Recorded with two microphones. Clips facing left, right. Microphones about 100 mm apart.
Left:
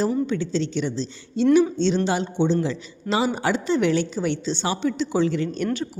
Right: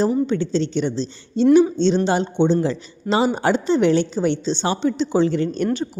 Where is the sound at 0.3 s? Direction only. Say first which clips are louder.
Right 4 dB; 35° right (ahead or behind).